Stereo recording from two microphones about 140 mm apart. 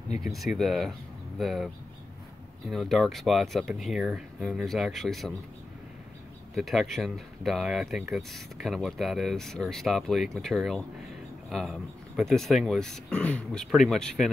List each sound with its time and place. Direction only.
0.2 s speech: centre (ahead or behind)
2.7 s speech: centre (ahead or behind)
6.5 s speech: centre (ahead or behind)